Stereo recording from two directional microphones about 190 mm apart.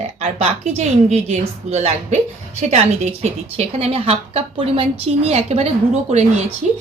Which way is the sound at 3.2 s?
35° right (ahead or behind).